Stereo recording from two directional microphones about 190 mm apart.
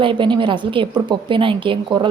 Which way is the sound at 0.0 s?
25° right (ahead or behind).